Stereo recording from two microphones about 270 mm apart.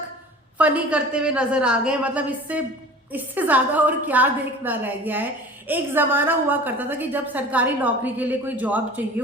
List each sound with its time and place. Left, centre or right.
0.6 s a woman's voice: centre